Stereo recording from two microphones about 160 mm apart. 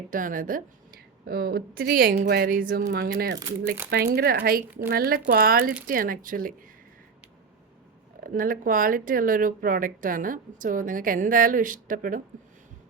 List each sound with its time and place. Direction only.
0.1 s a woman's voice: 60° right (ahead or behind)
2.9 s a woman's voice: 80° right; by 6.5 s 60° right (ahead or behind)
8.2 s speech: 60° right (ahead or behind)